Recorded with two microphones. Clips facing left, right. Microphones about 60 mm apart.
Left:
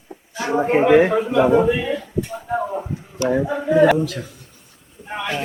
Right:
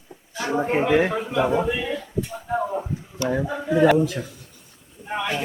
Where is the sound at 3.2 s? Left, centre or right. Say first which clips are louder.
Left 5 dB; centre.